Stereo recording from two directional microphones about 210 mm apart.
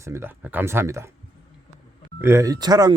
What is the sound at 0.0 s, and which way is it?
Speech, 10° right (ahead or behind).